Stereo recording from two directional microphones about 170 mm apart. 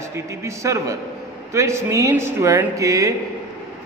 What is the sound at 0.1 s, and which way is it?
A man's voice, 15° right (ahead or behind).